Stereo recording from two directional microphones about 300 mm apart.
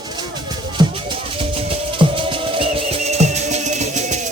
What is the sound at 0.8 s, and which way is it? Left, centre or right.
Music, centre.